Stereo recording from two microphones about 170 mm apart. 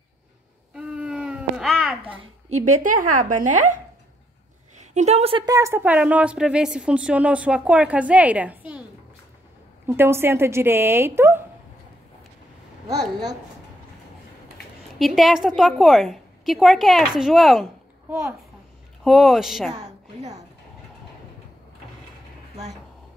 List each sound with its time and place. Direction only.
0.7 s baby cry: 5° right (ahead or behind)
1.8 s a woman's voice: 5° right (ahead or behind)
2.6 s a woman's voice: 50° right (ahead or behind)
4.9 s a woman's voice: 40° right (ahead or behind); by 8.8 s 10° right (ahead or behind)
9.8 s a woman's voice: 15° right (ahead or behind)
15.0 s a woman's voice: centre (ahead or behind)
19.0 s a woman's voice: centre (ahead or behind)